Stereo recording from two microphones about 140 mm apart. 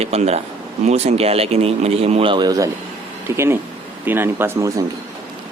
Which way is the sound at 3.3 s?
15° right (ahead or behind).